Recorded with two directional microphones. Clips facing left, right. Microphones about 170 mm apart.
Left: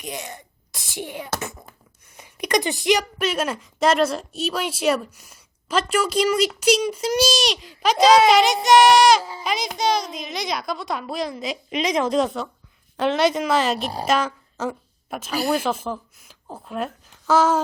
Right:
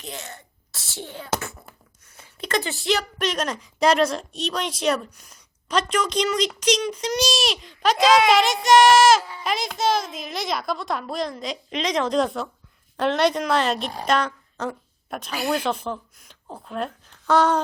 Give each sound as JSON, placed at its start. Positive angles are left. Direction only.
{"t": 0.0, "sound": "a child's voice", "side_deg": 15}
{"t": 1.4, "sound": "a sound", "side_deg": 20}
{"t": 3.2, "sound": "a woman's voice", "side_deg": 5}